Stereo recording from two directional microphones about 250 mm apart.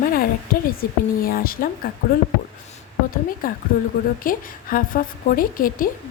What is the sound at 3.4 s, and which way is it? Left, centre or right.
A woman's voice, left.